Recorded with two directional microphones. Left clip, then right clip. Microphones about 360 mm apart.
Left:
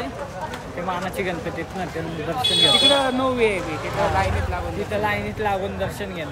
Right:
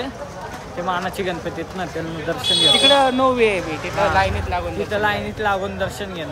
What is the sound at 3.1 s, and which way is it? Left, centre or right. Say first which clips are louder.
Speech: right 4 dB; centre.